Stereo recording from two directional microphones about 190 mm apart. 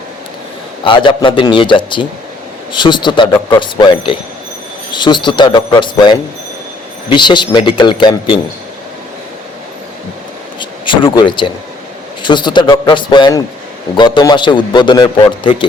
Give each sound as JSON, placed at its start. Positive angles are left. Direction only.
{"t": 0.9, "sound": "a man's voice", "side_deg": 25}
{"t": 10.6, "sound": "a man's voice", "side_deg": 25}